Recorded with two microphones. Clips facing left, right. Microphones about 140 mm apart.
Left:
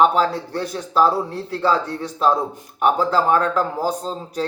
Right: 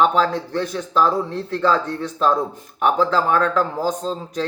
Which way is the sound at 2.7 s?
35° left (ahead or behind).